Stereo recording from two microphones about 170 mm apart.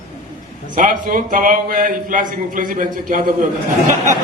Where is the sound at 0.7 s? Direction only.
50° right (ahead or behind).